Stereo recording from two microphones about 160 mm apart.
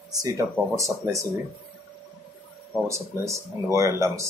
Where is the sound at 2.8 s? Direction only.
20° right (ahead or behind).